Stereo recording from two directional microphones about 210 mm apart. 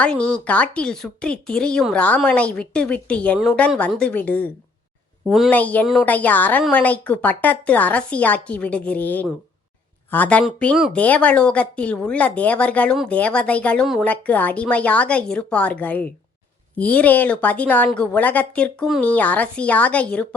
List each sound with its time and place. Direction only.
0.0 s speech: 5° left (ahead or behind)